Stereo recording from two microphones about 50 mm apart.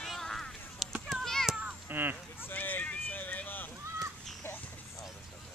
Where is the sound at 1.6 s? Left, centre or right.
Right.